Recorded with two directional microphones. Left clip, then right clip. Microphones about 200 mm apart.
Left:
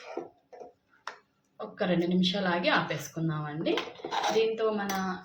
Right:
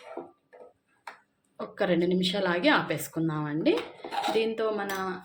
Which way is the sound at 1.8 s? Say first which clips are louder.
Right 3 dB; 40° right (ahead or behind).